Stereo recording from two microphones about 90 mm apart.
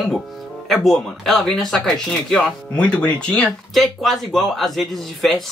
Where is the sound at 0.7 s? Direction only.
5° left (ahead or behind).